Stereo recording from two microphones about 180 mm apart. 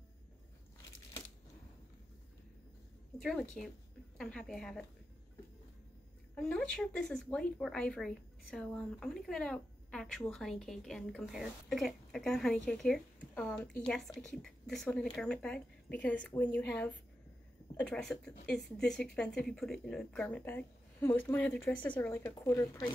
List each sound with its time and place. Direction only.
3.2 s a woman's voice: 5° left (ahead or behind)
6.3 s a woman's voice: 5° left (ahead or behind)